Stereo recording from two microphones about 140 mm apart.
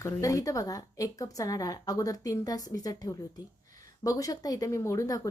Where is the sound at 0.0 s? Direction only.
25° left (ahead or behind).